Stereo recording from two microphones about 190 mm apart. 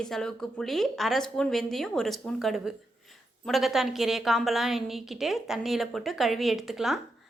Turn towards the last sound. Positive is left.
turn(degrees=0)  # may be behind; listen again after turning